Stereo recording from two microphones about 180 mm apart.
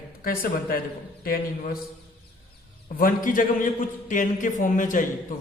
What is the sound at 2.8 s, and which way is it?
A man's voice, 50° left (ahead or behind).